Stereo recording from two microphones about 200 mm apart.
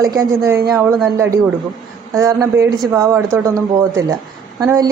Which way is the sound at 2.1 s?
15° right (ahead or behind).